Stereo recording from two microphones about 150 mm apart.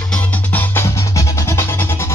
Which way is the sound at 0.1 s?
10° left (ahead or behind).